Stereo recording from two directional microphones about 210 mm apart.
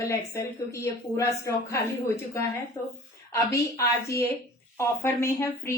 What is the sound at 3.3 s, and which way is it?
A woman's voice, 15° left (ahead or behind).